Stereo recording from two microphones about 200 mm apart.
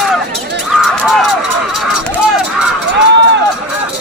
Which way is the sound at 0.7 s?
Centre (ahead or behind).